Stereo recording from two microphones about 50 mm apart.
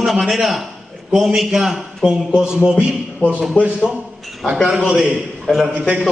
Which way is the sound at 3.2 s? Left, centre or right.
Left.